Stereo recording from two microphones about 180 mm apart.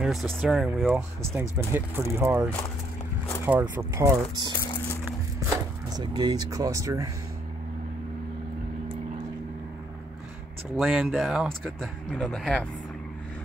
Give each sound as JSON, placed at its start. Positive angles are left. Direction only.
{"t": 0.0, "sound": "speech", "side_deg": 0}
{"t": 5.9, "sound": "speech", "side_deg": -20}
{"t": 10.8, "sound": "speech", "side_deg": 0}